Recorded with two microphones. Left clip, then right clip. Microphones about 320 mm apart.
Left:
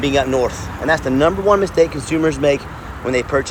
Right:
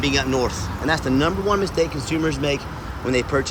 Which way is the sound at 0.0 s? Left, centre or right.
Centre.